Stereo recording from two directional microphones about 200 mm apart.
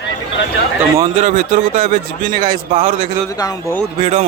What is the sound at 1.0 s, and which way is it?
Speech, 35° right (ahead or behind).